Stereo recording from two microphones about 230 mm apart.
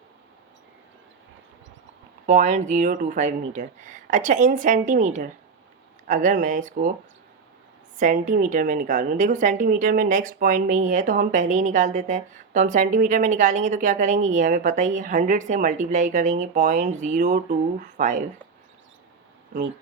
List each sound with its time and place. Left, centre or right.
2.2 s a woman's voice: right
7.9 s a woman's voice: right